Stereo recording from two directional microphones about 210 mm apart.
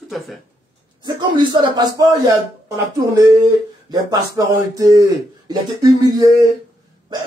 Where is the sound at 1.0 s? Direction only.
20° right (ahead or behind).